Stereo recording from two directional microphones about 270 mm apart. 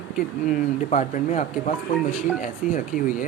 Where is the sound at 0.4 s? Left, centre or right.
Left.